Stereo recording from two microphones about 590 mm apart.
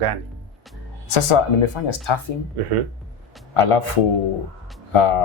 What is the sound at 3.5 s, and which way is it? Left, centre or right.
Speech, left.